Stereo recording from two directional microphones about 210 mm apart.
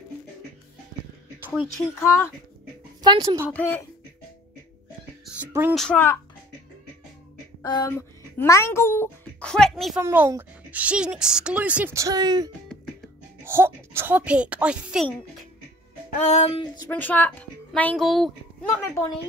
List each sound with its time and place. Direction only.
1.4 s music: 5° right (ahead or behind)
3.0 s a woman's voice: 20° right (ahead or behind)
3.5 s a woman's voice: 10° left (ahead or behind)
5.2 s music: 10° right (ahead or behind)
5.8 s a woman's voice: 5° left (ahead or behind)
7.6 s speech: 15° left (ahead or behind); by 10.0 s centre (ahead or behind)
10.0 s a woman's voice: 10° right (ahead or behind)
16.2 s music: 30° left (ahead or behind)
16.9 s a woman's voice: 10° left (ahead or behind)
18.7 s a woman's voice: 10° left (ahead or behind)